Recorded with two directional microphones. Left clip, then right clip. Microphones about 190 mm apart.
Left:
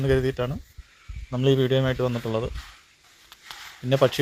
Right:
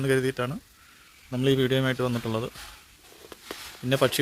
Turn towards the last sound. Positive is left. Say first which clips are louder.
# left 3 dB
turn(degrees=-15)  # may be behind; listen again after turning